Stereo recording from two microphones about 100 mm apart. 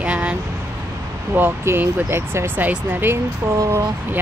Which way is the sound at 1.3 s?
20° right (ahead or behind).